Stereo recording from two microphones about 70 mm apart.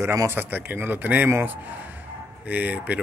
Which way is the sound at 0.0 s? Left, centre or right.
Right.